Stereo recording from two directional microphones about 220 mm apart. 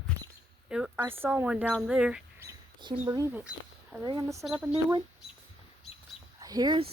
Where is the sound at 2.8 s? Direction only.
20° right (ahead or behind).